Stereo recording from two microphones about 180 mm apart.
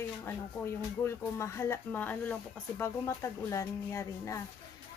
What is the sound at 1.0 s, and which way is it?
Speech, 15° left (ahead or behind).